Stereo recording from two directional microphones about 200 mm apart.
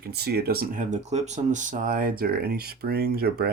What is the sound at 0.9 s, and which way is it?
Speech, 35° right (ahead or behind).